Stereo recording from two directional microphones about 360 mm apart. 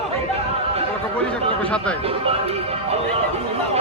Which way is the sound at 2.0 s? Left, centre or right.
Centre.